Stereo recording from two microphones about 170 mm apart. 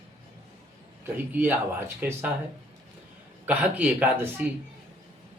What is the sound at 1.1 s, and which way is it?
Speech, 10° right (ahead or behind).